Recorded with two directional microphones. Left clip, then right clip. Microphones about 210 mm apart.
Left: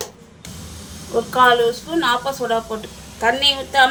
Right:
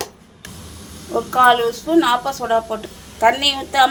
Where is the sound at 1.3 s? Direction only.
25° right (ahead or behind).